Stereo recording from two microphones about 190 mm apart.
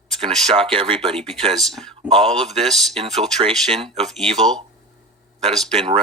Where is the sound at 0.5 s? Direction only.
30° right (ahead or behind).